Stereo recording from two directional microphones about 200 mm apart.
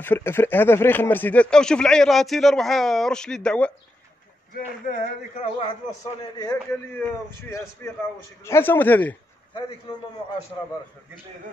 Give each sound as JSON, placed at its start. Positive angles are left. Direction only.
{"t": 0.0, "sound": "speech", "side_deg": 10}
{"t": 4.8, "sound": "a man's voice", "side_deg": 35}
{"t": 7.8, "sound": "a man's voice", "side_deg": 10}